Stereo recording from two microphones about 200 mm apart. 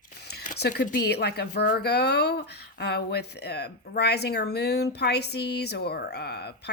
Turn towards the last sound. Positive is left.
turn(degrees=55)  # may be behind; listen again after turning